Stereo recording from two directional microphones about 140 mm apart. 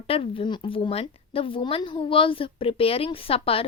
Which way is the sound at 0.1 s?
40° left (ahead or behind).